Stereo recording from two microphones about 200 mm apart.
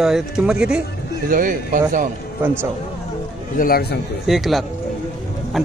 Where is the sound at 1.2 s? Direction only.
40° right (ahead or behind).